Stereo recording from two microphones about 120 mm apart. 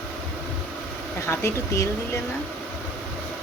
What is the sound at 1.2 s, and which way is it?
Speech, 25° left (ahead or behind).